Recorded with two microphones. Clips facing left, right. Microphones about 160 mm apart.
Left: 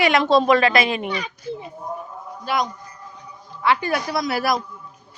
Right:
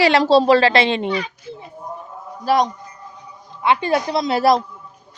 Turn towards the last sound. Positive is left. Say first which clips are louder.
# right 6 dB
turn(degrees=-25)  # may be behind; listen again after turning